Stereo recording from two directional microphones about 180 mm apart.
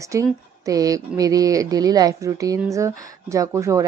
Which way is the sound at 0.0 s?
15° right (ahead or behind).